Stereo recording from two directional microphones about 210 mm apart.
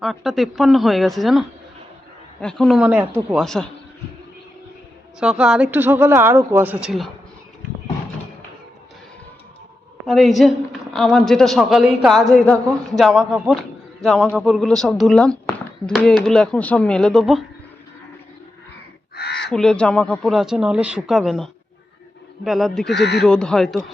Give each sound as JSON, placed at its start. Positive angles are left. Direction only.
{"t": 0.0, "sound": "a woman's voice", "side_deg": 0}
{"t": 5.2, "sound": "speech", "side_deg": -5}
{"t": 10.1, "sound": "a woman's voice", "side_deg": 0}
{"t": 19.1, "sound": "crow", "side_deg": 50}
{"t": 19.5, "sound": "a woman's voice", "side_deg": 5}
{"t": 22.9, "sound": "speech", "side_deg": 55}
{"t": 23.2, "sound": "a woman's voice", "side_deg": 5}